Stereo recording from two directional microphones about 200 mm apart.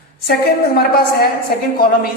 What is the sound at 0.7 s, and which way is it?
A man's voice, 50° left (ahead or behind).